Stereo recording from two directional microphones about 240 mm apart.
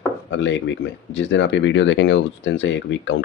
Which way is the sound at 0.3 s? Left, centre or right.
Left.